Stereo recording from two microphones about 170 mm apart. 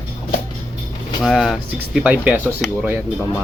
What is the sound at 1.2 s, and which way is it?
Speech, centre (ahead or behind).